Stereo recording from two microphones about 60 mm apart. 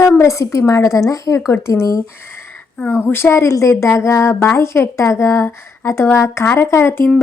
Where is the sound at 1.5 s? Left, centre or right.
Left.